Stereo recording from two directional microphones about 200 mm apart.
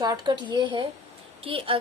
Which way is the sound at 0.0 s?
20° right (ahead or behind).